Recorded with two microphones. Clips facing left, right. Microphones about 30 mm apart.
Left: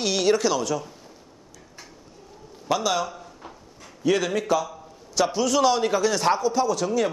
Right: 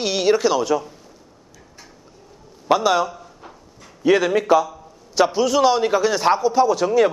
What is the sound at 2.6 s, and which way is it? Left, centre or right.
Speech, centre.